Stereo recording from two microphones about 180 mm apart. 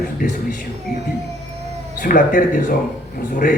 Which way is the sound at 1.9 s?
50° left (ahead or behind).